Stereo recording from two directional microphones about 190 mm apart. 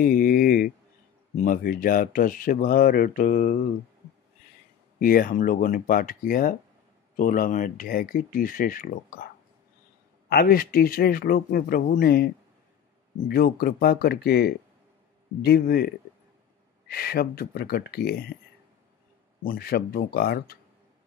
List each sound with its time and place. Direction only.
0.0 s a sound: 45° left (ahead or behind)
1.3 s speech: 45° left (ahead or behind)
4.9 s speech: 45° left (ahead or behind)
10.3 s speech: 50° left (ahead or behind)
13.3 s speech: 55° left (ahead or behind)
16.9 s speech: 55° left (ahead or behind)
19.4 s speech: 50° left (ahead or behind)